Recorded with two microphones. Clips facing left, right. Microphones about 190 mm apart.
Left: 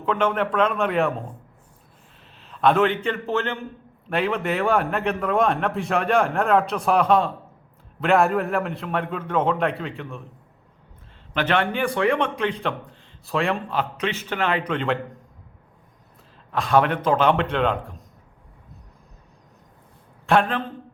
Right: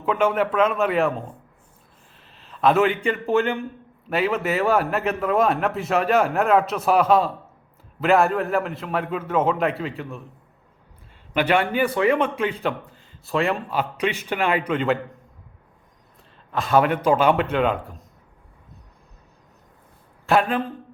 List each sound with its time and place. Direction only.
0.0 s a man's voice: 10° right (ahead or behind)
11.3 s a man's voice: 10° right (ahead or behind)
16.5 s speech: centre (ahead or behind)
20.2 s speech: 5° right (ahead or behind)